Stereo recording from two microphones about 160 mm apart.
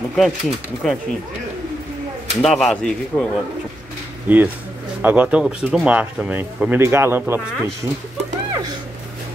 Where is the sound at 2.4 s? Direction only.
5° left (ahead or behind).